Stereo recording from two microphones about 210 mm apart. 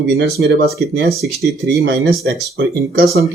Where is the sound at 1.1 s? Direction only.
Centre (ahead or behind).